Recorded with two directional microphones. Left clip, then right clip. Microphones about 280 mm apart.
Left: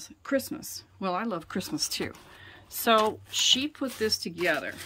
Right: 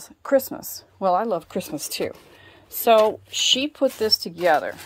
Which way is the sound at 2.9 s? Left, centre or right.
Centre.